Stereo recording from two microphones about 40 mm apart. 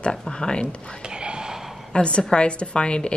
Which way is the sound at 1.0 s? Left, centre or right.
Right.